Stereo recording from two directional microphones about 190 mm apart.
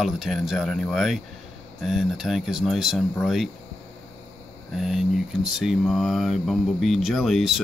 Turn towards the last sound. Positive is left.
turn(degrees=0)  # may be behind; listen again after turning